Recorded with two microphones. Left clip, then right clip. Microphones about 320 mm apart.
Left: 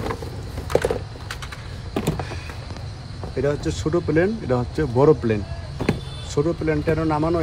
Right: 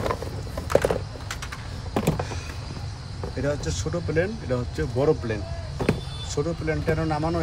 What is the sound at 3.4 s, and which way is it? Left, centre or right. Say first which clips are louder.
Speech: left 5 dB; centre.